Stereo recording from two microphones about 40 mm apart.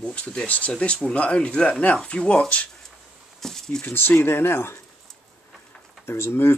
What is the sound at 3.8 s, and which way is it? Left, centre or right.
Speech, left.